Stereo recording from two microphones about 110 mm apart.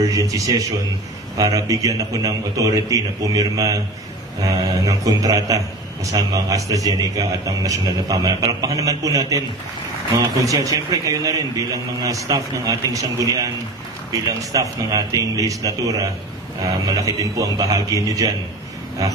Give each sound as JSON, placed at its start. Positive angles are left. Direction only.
{"t": 0.0, "sound": "a man's voice", "side_deg": -30}
{"t": 14.5, "sound": "a man's voice", "side_deg": -30}